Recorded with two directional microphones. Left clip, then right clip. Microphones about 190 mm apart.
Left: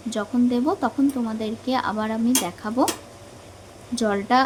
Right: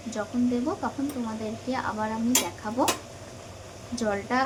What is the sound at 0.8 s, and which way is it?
Speech, 50° left (ahead or behind).